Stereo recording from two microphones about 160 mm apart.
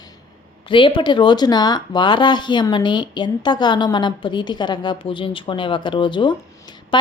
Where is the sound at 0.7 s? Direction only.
30° left (ahead or behind).